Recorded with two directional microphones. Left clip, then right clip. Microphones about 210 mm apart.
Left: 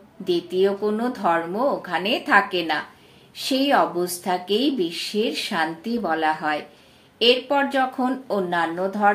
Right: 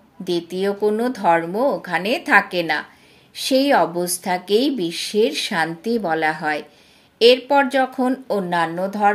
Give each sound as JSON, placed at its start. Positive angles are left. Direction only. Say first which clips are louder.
{"t": 0.2, "sound": "speech", "louder": "left 2 dB", "side_deg": -45}